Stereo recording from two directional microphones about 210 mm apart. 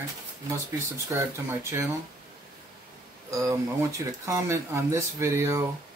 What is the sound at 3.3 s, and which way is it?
Speech, 15° right (ahead or behind).